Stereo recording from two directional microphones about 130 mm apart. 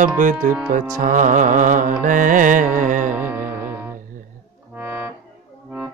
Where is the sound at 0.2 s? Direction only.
85° right.